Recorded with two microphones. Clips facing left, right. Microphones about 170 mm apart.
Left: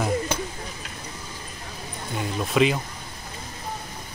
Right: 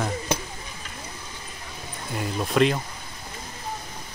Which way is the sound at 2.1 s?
Centre (ahead or behind).